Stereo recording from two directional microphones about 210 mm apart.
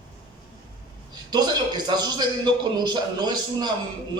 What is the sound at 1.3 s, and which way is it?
A man's voice, 20° right (ahead or behind).